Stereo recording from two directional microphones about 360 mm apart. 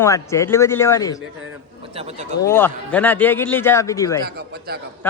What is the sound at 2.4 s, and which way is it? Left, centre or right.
A man's voice, centre.